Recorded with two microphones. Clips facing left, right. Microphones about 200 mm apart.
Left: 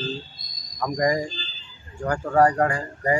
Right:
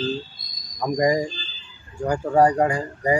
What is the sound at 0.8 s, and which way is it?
Speech, 20° right (ahead or behind).